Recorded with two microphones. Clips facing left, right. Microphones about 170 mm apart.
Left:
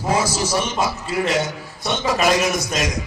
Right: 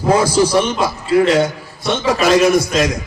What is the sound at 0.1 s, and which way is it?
A man's voice, 55° right (ahead or behind).